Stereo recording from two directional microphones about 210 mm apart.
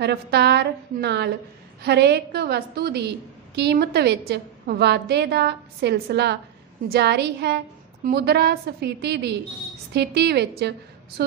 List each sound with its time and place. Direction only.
0.0 s a woman's voice: 50° right (ahead or behind)